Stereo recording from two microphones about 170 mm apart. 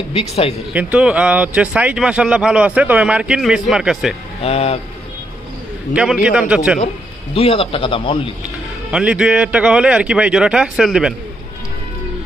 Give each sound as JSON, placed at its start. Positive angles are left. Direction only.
{"t": 0.1, "sound": "speech", "side_deg": 35}
{"t": 0.7, "sound": "speech", "side_deg": -5}
{"t": 4.4, "sound": "speech", "side_deg": 35}
{"t": 5.9, "sound": "speech", "side_deg": -5}
{"t": 7.3, "sound": "speech", "side_deg": 35}
{"t": 8.9, "sound": "speech", "side_deg": -5}